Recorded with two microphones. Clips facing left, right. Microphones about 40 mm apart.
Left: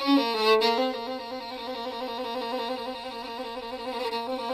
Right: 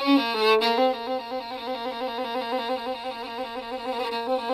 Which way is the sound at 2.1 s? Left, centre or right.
Centre.